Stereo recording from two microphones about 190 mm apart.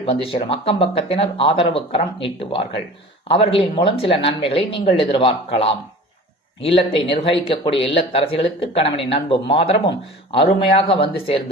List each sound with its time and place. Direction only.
0.0 s speech: 30° left (ahead or behind)